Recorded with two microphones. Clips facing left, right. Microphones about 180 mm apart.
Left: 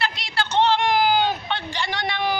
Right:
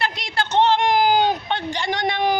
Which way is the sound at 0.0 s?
50° right (ahead or behind).